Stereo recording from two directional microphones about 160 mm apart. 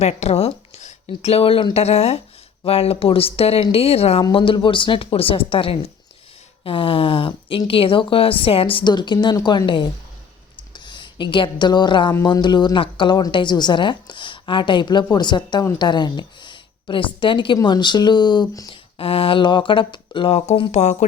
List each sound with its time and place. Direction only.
0.0 s a woman's voice: 40° left (ahead or behind); by 18.7 s 25° left (ahead or behind)
18.7 s speech: 35° left (ahead or behind)